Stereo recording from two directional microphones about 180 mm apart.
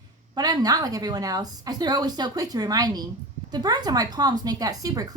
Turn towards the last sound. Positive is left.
turn(degrees=-20)  # may be behind; listen again after turning